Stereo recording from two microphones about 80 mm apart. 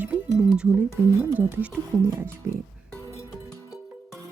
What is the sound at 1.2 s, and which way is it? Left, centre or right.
Speech, right.